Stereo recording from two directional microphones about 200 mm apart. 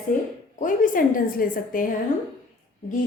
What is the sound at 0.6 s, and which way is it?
A woman's voice, 40° left (ahead or behind).